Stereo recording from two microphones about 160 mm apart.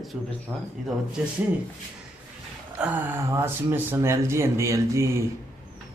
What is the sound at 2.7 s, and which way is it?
Speech, 10° right (ahead or behind).